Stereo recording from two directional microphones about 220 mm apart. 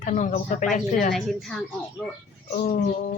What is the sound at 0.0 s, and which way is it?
Speech, 35° left (ahead or behind).